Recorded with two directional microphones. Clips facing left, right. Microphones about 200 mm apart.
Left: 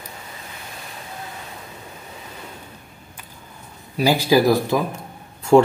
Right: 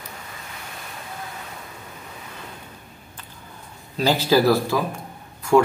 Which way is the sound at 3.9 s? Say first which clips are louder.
Left 2 dB; 10° left (ahead or behind).